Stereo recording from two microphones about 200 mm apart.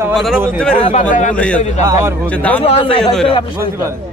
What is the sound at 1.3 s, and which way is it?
Speech, 5° left (ahead or behind).